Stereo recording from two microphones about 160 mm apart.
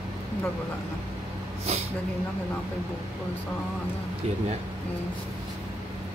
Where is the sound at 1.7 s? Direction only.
40° right (ahead or behind).